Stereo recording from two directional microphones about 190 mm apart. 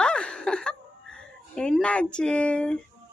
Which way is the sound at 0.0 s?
5° left (ahead or behind).